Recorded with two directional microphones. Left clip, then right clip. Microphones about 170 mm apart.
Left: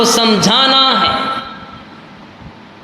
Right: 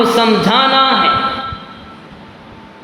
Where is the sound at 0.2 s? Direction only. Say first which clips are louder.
Even; 65° left (ahead or behind).